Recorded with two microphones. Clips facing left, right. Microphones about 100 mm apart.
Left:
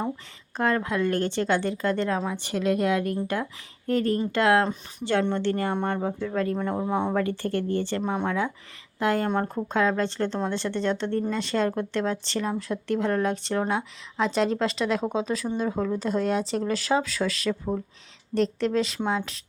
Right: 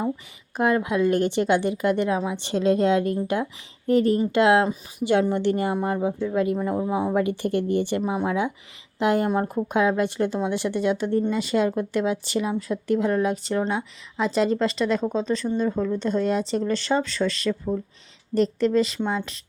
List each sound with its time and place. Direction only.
0.5 s speech: 15° right (ahead or behind)
7.2 s speech: 15° right (ahead or behind); by 19.4 s centre (ahead or behind)